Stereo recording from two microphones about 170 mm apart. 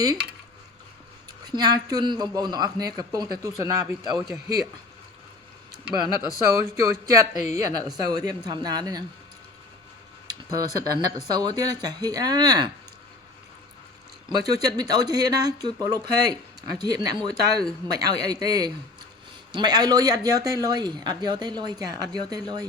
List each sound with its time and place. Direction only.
1.5 s speech: 25° right (ahead or behind)
6.7 s speech: 15° right (ahead or behind)
10.5 s speech: 20° right (ahead or behind)
14.3 s speech: 20° right (ahead or behind)